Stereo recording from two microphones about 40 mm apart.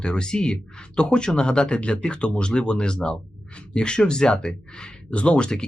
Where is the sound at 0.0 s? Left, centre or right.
Left.